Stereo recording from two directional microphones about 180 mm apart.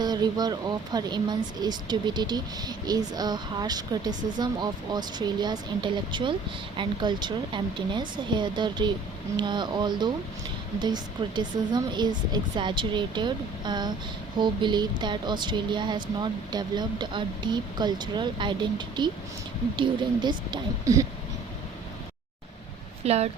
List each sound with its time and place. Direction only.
0.0 s speech: 25° right (ahead or behind)
23.0 s speech: 35° right (ahead or behind)